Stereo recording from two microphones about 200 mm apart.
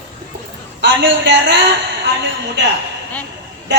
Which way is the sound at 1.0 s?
65° right (ahead or behind).